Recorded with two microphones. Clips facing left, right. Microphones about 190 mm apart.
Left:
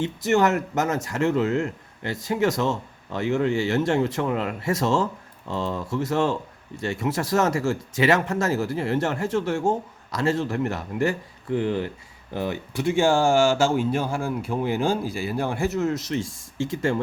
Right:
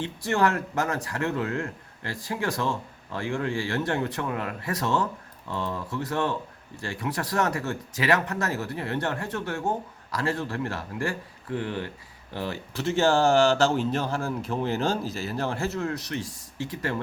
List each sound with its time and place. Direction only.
0.0 s speech: 20° left (ahead or behind)